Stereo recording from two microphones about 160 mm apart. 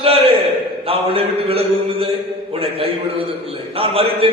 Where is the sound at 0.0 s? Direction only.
35° right (ahead or behind).